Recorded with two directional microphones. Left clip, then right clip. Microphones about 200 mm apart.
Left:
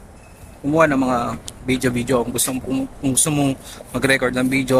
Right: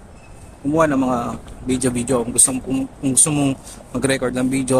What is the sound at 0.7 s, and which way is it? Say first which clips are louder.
Speech: left 1 dB; 5° right (ahead or behind).